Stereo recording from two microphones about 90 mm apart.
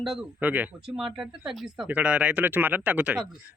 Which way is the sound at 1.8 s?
15° right (ahead or behind).